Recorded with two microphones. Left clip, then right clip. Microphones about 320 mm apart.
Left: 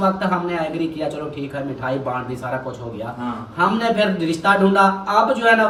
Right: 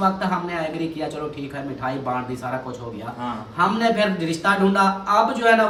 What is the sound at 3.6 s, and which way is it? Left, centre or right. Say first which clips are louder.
Speech: left 1 dB; centre.